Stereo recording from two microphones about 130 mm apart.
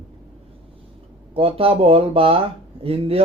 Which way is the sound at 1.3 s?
45° right (ahead or behind).